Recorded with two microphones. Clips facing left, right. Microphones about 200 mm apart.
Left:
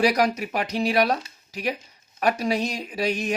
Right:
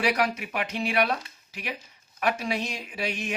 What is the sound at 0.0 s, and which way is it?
Speech, 40° left (ahead or behind).